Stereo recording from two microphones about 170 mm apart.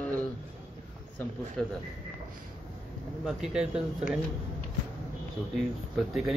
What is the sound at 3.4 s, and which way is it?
Speech, 5° right (ahead or behind).